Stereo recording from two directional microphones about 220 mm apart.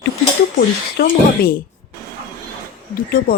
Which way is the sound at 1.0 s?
45° left (ahead or behind).